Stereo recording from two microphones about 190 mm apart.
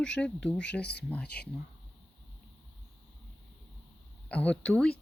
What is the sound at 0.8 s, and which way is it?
Speech, 60° left (ahead or behind).